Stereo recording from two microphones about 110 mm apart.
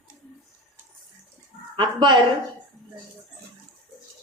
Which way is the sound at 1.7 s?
45° right (ahead or behind).